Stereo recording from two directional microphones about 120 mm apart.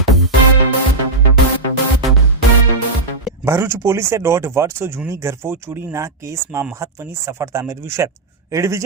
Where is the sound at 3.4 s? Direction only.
20° right (ahead or behind).